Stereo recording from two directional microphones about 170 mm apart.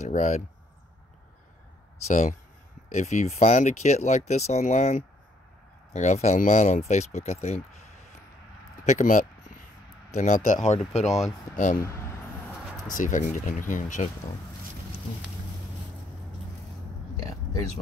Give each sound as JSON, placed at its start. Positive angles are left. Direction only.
{"t": 0.0, "sound": "speech", "side_deg": 45}
{"t": 2.0, "sound": "speech", "side_deg": 40}
{"t": 8.8, "sound": "speech", "side_deg": 45}
{"t": 11.1, "sound": "speech", "side_deg": 0}
{"t": 11.5, "sound": "speech", "side_deg": 50}
{"t": 12.9, "sound": "speech", "side_deg": 50}
{"t": 17.2, "sound": "a sound", "side_deg": 20}